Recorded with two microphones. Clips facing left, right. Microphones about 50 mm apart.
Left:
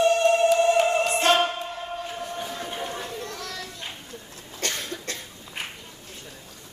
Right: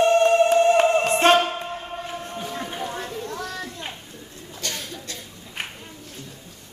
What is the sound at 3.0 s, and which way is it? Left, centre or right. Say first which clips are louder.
Chatter: right 2 dB; centre.